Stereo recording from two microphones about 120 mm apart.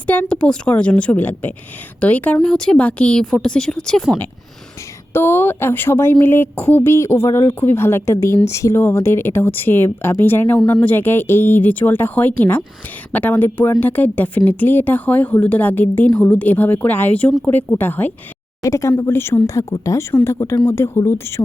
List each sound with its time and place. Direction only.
0.1 s a woman's voice: 10° left (ahead or behind)
5.1 s a woman's voice: 20° left (ahead or behind)